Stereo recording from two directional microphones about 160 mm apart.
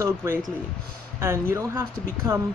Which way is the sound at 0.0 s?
20° right (ahead or behind).